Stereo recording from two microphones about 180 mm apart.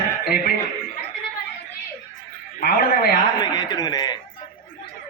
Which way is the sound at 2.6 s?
60° left (ahead or behind).